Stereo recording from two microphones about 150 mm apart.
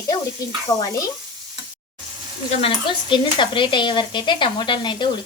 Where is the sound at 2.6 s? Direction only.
30° left (ahead or behind).